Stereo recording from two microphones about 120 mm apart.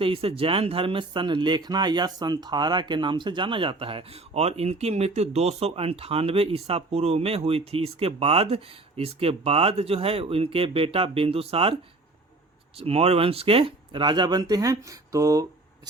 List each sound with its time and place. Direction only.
0.0 s speech: 50° right (ahead or behind); by 15.4 s 30° right (ahead or behind)